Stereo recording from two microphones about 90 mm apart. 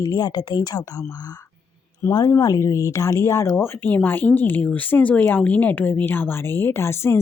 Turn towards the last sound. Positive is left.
turn(degrees=30)  # may be behind; listen again after turning